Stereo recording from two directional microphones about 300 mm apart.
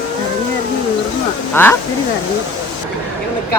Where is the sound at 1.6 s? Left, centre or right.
Centre.